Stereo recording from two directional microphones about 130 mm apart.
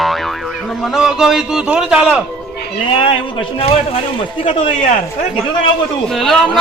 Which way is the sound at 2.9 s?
45° left (ahead or behind).